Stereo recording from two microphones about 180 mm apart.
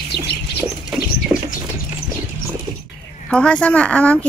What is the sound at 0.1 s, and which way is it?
Bird, 65° left (ahead or behind).